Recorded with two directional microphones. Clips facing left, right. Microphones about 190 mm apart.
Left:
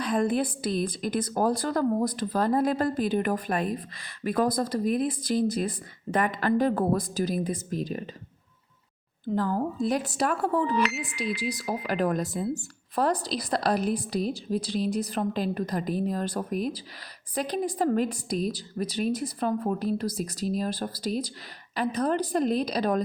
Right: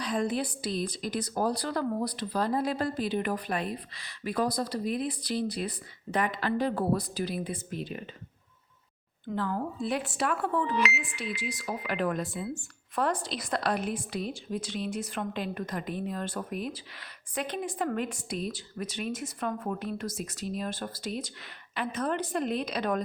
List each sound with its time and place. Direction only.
0.0 s a woman's voice: 50° left (ahead or behind)
9.3 s a woman's voice: 40° left (ahead or behind)